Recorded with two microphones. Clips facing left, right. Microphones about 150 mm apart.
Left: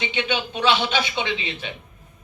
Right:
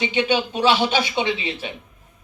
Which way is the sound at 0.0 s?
15° right (ahead or behind).